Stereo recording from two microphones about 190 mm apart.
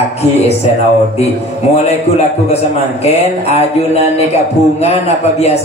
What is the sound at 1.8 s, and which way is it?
A man's voice, 35° left (ahead or behind).